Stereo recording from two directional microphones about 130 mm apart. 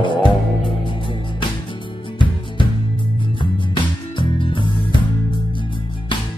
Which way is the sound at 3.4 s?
40° left (ahead or behind).